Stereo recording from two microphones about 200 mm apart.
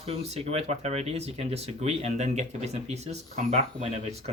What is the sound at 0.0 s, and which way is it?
Speech, 30° right (ahead or behind).